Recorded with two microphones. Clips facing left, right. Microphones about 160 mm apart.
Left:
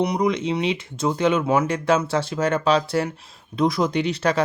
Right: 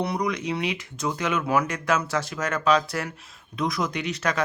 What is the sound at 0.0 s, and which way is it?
Speech, 20° left (ahead or behind).